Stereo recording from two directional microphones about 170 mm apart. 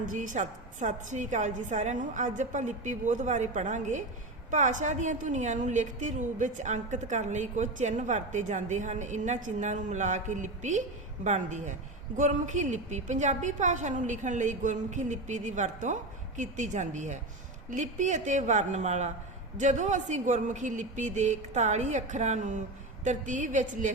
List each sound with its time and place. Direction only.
0.1 s a woman's voice: 50° right (ahead or behind)